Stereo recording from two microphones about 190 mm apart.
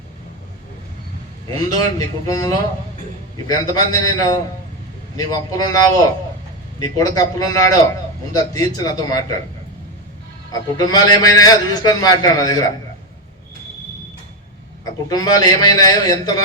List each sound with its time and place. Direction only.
1.5 s a man's voice: 20° left (ahead or behind)
10.8 s a man's voice: 20° left (ahead or behind)
15.1 s a man's voice: 20° left (ahead or behind)